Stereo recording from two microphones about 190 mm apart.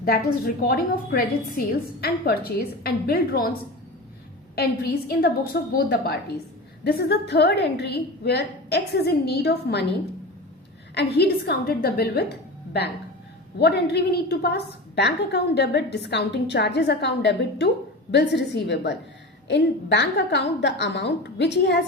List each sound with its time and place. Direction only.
0.0 s a woman's voice: 55° left (ahead or behind)
4.5 s a woman's voice: 55° left (ahead or behind)
10.9 s a woman's voice: 55° left (ahead or behind)
13.6 s a woman's voice: 60° left (ahead or behind)